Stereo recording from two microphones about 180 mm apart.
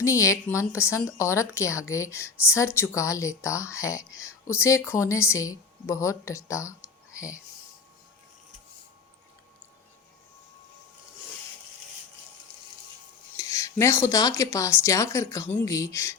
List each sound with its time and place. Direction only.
0.0 s a woman's voice: 15° left (ahead or behind)
13.3 s a woman's voice: 15° left (ahead or behind)